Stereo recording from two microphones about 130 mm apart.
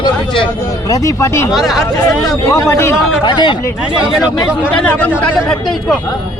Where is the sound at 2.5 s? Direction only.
20° left (ahead or behind).